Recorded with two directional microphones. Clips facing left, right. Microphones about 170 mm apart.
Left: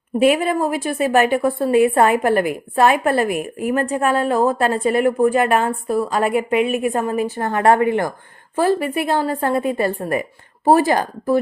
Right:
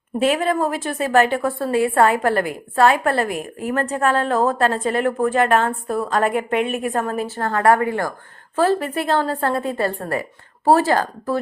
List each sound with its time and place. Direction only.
0.2 s a woman's voice: 15° left (ahead or behind)